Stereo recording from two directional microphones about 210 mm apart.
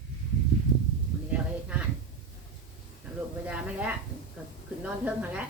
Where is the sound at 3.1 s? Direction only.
5° right (ahead or behind).